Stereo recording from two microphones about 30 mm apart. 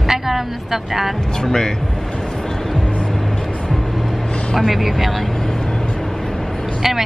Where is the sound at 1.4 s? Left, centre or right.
Centre.